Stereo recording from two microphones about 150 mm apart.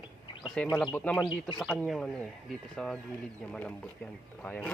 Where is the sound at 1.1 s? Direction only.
30° left (ahead or behind).